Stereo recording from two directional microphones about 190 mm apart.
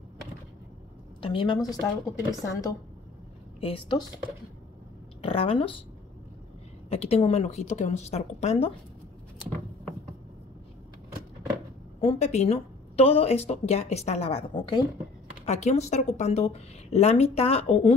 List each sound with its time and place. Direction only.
1.2 s a woman's voice: 25° left (ahead or behind)
3.6 s a woman's voice: 30° left (ahead or behind)
5.2 s a woman's voice: 30° left (ahead or behind)
6.9 s speech: 30° left (ahead or behind)
12.0 s speech: 35° left (ahead or behind)
15.4 s speech: 35° left (ahead or behind)